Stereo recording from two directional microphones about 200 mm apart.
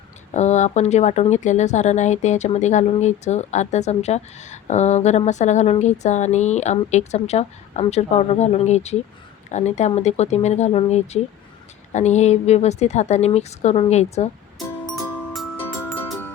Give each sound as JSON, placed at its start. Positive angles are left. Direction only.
{"t": 0.3, "sound": "a woman's voice", "side_deg": 35}
{"t": 14.9, "sound": "music", "side_deg": 0}